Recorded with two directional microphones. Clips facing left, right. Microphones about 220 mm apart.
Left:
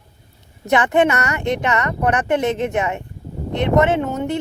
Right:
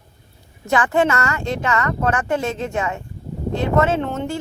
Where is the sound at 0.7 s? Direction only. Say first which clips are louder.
Left 2 dB; 20° left (ahead or behind).